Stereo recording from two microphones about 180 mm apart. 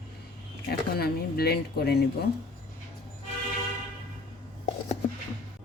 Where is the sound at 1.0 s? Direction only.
60° left (ahead or behind).